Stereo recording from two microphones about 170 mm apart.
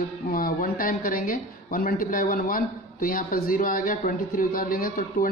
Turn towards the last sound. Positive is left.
turn(degrees=55)  # may be behind; listen again after turning